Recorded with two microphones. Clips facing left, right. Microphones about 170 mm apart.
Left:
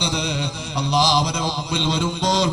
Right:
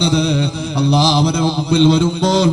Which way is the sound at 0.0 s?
55° right (ahead or behind).